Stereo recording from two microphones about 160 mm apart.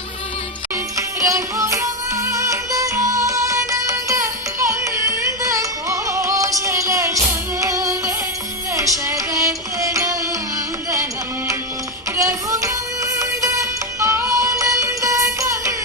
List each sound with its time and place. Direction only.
0.9 s music: 20° right (ahead or behind)
12.1 s music: 20° right (ahead or behind)